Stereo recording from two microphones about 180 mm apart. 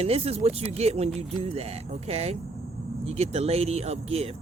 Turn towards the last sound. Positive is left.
turn(degrees=-35)  # may be behind; listen again after turning